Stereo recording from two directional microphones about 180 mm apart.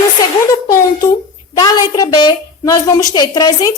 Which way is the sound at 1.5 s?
20° left (ahead or behind).